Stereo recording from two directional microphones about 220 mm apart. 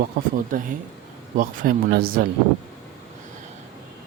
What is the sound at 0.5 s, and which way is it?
Speech, 40° right (ahead or behind).